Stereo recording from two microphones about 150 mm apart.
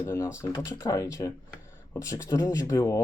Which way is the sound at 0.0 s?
20° left (ahead or behind).